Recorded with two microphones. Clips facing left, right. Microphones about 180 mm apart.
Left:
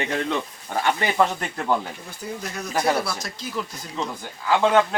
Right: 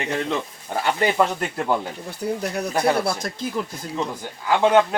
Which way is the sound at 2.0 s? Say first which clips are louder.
Right 7 dB; 60° right (ahead or behind).